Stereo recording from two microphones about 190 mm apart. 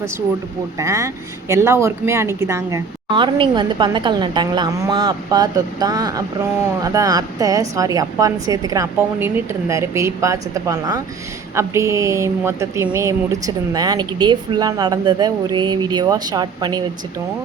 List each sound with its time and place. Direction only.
0.8 s a woman's voice: 15° right (ahead or behind)